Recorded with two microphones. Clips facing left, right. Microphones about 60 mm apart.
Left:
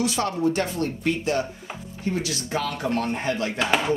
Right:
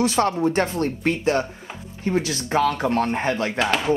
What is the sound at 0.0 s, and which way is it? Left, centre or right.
Speech, right.